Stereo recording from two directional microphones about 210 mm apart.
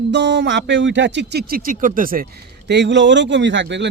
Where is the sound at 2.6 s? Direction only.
55° right (ahead or behind).